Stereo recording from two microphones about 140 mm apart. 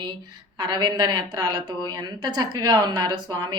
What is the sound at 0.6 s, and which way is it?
A woman's voice, 30° right (ahead or behind).